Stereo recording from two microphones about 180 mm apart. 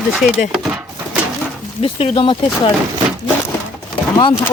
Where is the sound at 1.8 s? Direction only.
30° left (ahead or behind).